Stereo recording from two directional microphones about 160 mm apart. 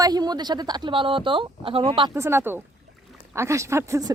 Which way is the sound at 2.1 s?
15° right (ahead or behind).